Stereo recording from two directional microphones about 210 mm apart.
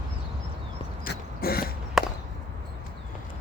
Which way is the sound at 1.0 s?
45° left (ahead or behind).